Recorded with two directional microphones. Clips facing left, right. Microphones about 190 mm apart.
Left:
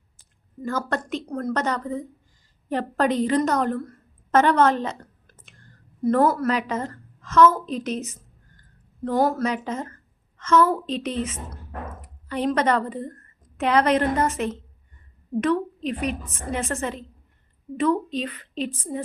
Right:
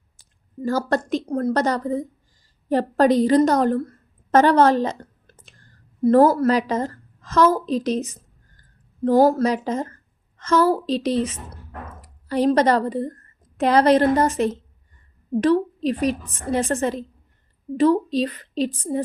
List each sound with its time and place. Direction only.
0.6 s a woman's voice: 35° right (ahead or behind)